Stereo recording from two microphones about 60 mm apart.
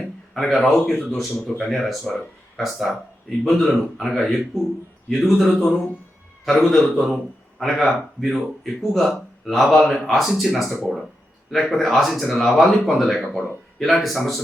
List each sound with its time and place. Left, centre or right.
0.3 s speech: centre